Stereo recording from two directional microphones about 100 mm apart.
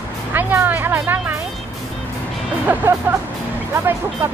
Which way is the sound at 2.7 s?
20° right (ahead or behind).